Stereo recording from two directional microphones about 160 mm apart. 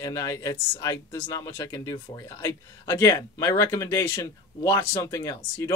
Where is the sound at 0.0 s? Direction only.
20° left (ahead or behind).